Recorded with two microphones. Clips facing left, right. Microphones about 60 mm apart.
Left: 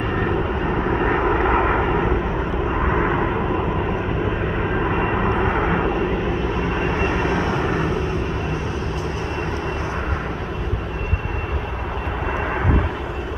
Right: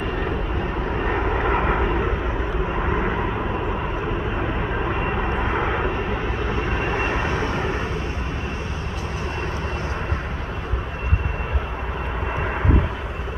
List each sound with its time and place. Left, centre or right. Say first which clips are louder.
1.0 s vehicle: left 3 dB; centre
5.4 s vehicle: left 3 dB; centre
6.8 s vehicle: left 3 dB; centre